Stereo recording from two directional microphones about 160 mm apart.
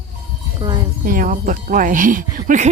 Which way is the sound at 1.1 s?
55° right (ahead or behind).